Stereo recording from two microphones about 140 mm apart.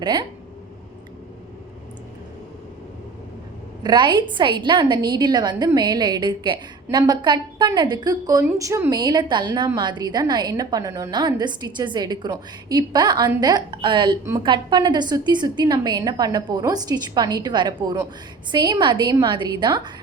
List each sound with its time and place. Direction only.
0.0 s a woman's voice: 35° right (ahead or behind)
3.8 s a woman's voice: 30° right (ahead or behind)
9.0 s a woman's voice: 30° right (ahead or behind)